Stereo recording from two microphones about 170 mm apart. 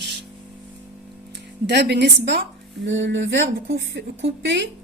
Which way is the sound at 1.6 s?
85° right.